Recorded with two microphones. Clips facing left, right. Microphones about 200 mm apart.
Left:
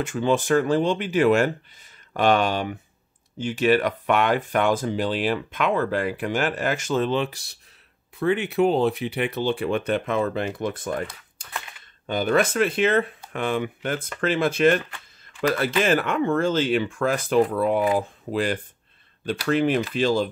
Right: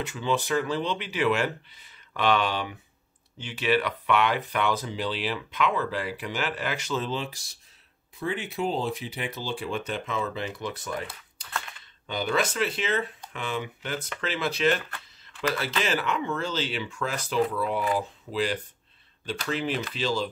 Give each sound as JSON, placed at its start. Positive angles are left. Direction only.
{"t": 0.0, "sound": "speech", "side_deg": 50}
{"t": 12.1, "sound": "speech", "side_deg": 50}
{"t": 15.8, "sound": "speech", "side_deg": 50}